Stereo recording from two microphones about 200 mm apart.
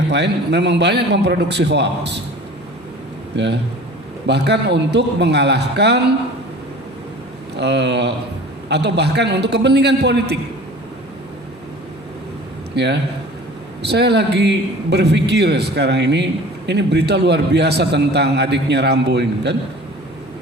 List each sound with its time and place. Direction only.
0.1 s a man's voice: 60° right (ahead or behind)
3.3 s a man's voice: 60° right (ahead or behind)
7.5 s a man's voice: 60° right (ahead or behind)
12.7 s a man's voice: 60° right (ahead or behind)